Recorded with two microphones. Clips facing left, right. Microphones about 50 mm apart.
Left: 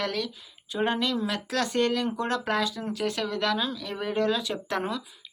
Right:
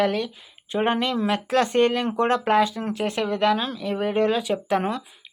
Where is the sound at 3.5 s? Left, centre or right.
Right.